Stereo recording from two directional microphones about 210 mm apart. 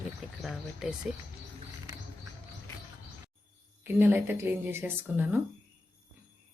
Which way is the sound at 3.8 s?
10° right (ahead or behind).